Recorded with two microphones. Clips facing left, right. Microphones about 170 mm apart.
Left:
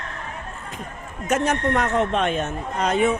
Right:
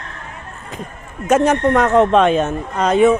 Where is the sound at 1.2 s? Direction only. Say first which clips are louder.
Right 7 dB; 90° right.